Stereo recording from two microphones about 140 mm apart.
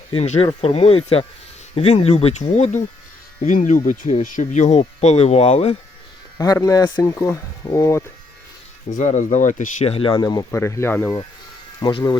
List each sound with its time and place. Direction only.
0.1 s speech: 45° left (ahead or behind)
3.4 s speech: 65° left (ahead or behind); by 5.7 s 50° left (ahead or behind)
6.4 s speech: 25° left (ahead or behind)
8.9 s speech: 65° left (ahead or behind); by 10.1 s 45° left (ahead or behind)
10.1 s speech: 30° left (ahead or behind)
11.8 s speech: 35° left (ahead or behind)